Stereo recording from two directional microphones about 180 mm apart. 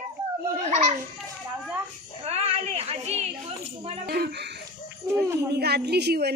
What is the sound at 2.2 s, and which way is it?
A woman's voice, 35° right (ahead or behind).